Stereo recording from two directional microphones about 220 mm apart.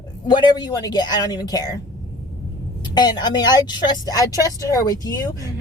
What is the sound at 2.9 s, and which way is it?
A woman's voice, 20° left (ahead or behind).